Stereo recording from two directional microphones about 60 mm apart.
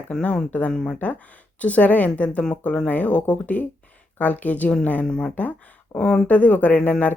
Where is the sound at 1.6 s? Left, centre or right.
Left.